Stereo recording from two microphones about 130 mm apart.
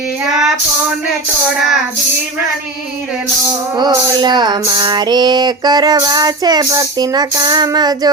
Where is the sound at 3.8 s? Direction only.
35° right (ahead or behind).